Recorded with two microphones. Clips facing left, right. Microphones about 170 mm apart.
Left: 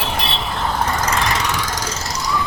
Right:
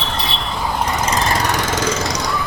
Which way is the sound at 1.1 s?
30° right (ahead or behind).